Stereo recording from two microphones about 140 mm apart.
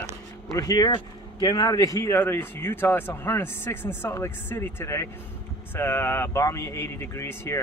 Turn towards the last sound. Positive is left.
turn(degrees=20)  # may be behind; listen again after turning